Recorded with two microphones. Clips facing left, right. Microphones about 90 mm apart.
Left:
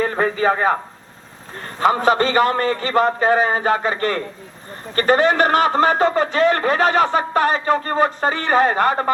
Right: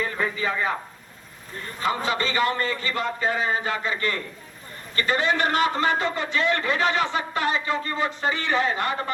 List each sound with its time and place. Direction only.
0.0 s a man's voice: 45° left (ahead or behind)